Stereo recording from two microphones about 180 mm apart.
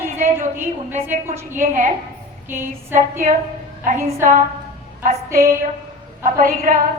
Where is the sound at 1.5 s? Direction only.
45° right (ahead or behind).